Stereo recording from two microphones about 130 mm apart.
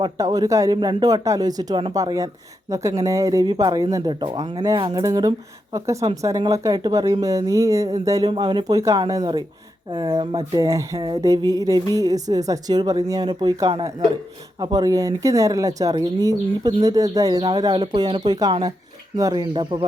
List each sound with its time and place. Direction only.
0.0 s speech: 30° right (ahead or behind)
4.1 s speech: 40° right (ahead or behind)
4.6 s speech: 25° right (ahead or behind)
8.3 s speech: 40° right (ahead or behind)